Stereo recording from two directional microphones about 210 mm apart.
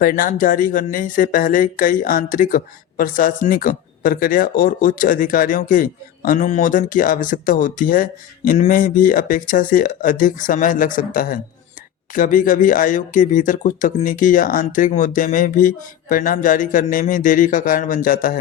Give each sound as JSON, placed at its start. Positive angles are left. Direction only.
{"t": 0.0, "sound": "speech", "side_deg": 40}